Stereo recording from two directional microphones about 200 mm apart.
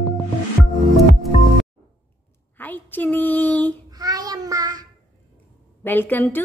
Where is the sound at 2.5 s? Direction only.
10° left (ahead or behind).